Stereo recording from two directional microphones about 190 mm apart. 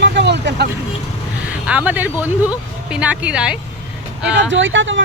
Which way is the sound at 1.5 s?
5° right (ahead or behind).